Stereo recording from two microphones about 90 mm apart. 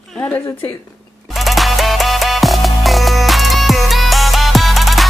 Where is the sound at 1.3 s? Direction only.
Centre (ahead or behind).